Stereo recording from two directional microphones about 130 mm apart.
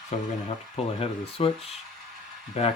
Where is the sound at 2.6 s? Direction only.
55° left (ahead or behind).